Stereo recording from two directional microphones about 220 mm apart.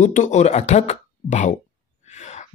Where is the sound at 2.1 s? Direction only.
30° left (ahead or behind).